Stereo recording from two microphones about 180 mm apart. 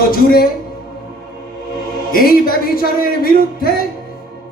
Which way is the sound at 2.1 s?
55° left (ahead or behind).